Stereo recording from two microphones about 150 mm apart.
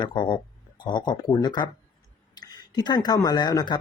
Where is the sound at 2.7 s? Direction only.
30° left (ahead or behind).